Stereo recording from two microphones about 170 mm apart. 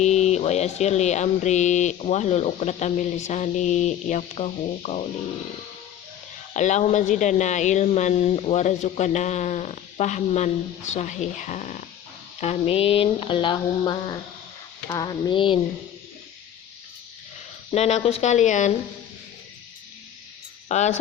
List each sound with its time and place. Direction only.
0.0 s speech: 40° left (ahead or behind)
6.5 s speech: 45° left (ahead or behind)
17.7 s speech: 40° left (ahead or behind)
20.7 s speech: 45° left (ahead or behind)